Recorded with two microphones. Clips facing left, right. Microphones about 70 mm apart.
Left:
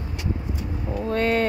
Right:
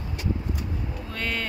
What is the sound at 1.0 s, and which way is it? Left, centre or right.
Speech, left.